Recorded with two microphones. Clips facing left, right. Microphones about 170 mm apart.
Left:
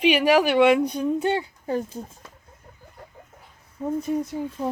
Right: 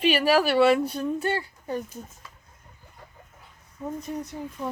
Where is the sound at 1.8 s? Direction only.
30° left (ahead or behind).